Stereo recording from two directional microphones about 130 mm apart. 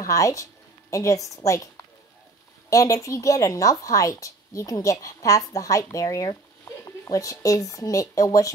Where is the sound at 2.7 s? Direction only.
25° left (ahead or behind).